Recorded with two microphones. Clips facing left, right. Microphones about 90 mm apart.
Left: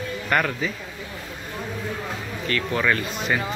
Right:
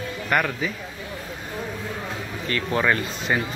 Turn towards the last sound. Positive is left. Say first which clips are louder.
# even
turn(degrees=-25)  # may be behind; listen again after turning